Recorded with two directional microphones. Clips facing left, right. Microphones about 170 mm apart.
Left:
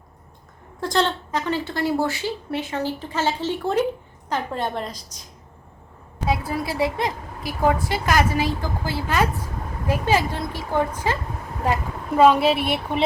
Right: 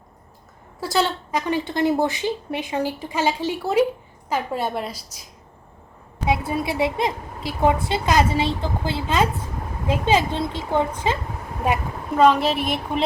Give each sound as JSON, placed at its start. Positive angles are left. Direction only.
{"t": 0.8, "sound": "a woman's voice", "side_deg": -5}
{"t": 6.2, "sound": "a woman's voice", "side_deg": -25}
{"t": 12.1, "sound": "speech", "side_deg": 10}